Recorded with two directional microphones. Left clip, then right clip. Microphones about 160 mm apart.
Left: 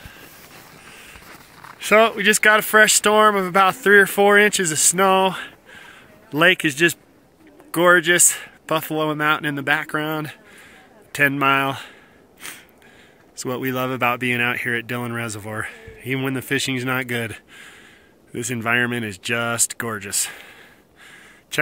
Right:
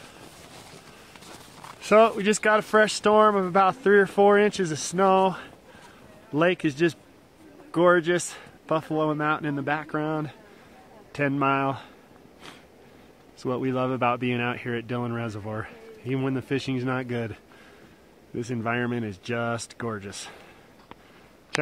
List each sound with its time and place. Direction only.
1.6 s speech: 10° left (ahead or behind)
12.4 s snort: 10° left (ahead or behind)
13.4 s speech: 15° left (ahead or behind)